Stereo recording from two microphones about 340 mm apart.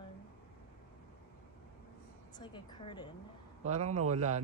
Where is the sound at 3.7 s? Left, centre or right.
Centre.